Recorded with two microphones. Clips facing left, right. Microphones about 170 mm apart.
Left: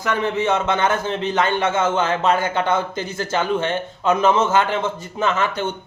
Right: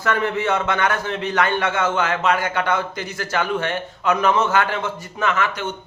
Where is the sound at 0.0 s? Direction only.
15° left (ahead or behind).